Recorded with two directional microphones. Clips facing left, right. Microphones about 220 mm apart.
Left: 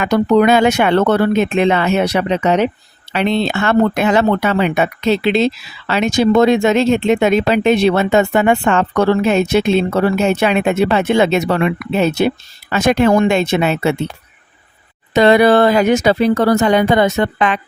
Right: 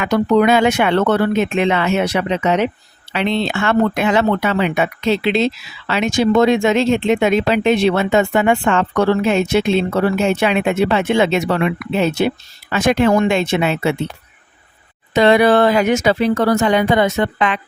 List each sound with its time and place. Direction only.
0.0 s speech: 40° left (ahead or behind)
15.1 s speech: 40° left (ahead or behind)